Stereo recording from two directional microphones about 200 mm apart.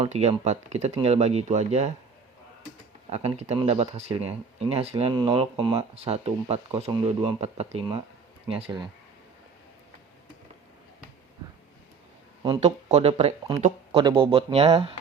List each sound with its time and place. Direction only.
0.0 s speech: 35° right (ahead or behind)
3.1 s speech: 35° right (ahead or behind)
12.6 s speech: 35° right (ahead or behind)